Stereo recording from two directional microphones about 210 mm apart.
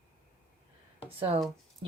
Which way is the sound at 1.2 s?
25° right (ahead or behind).